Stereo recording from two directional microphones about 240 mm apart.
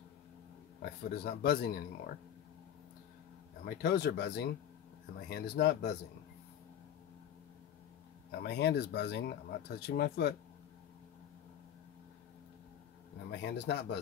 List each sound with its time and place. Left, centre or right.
1.1 s speech: left
3.6 s speech: left
8.4 s speech: left
13.3 s speech: left